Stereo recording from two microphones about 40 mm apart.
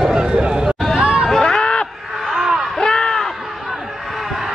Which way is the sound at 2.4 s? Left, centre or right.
Centre.